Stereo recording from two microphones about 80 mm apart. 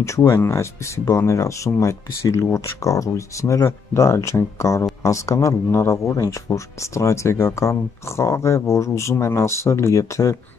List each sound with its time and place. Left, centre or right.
0.0 s speech: left